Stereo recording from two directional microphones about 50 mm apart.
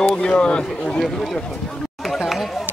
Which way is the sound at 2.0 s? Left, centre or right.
Centre.